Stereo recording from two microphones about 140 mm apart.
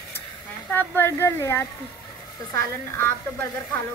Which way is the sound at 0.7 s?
15° left (ahead or behind).